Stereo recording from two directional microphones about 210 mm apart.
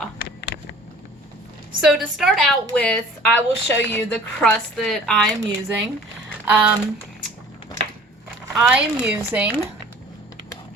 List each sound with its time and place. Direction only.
0.2 s a sound: 50° left (ahead or behind)
1.8 s a woman's voice: centre (ahead or behind)
8.5 s speech: 5° right (ahead or behind)